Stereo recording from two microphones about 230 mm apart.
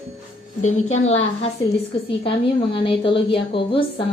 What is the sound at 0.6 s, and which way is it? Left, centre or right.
Speech, left.